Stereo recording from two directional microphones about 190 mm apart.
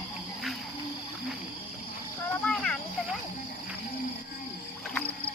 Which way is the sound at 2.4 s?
5° left (ahead or behind).